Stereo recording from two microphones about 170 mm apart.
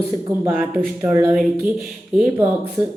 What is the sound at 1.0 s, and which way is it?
Speech, 15° right (ahead or behind).